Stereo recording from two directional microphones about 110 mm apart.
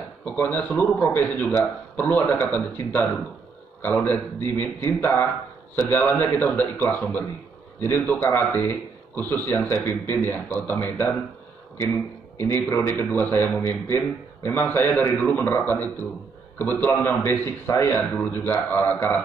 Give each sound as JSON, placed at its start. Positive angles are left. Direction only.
{"t": 0.2, "sound": "a man's voice", "side_deg": 15}
{"t": 12.4, "sound": "a man's voice", "side_deg": 20}